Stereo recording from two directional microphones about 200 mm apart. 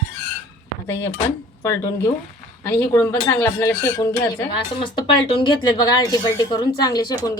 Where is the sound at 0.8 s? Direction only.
10° left (ahead or behind).